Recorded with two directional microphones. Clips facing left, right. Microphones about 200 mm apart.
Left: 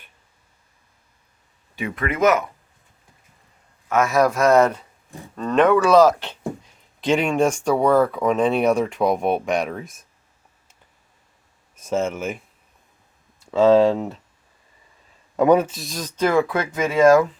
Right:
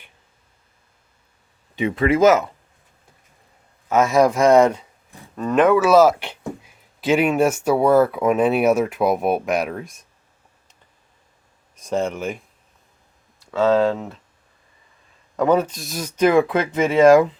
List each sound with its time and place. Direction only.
1.7 s speech: 25° right (ahead or behind)
3.8 s speech: 20° right (ahead or behind); by 10.1 s centre (ahead or behind)
11.8 s speech: 5° left (ahead or behind)
13.4 s speech: 25° left (ahead or behind)
13.9 s speech: 10° left (ahead or behind)
15.4 s speech: 15° left (ahead or behind); by 17.2 s 25° right (ahead or behind)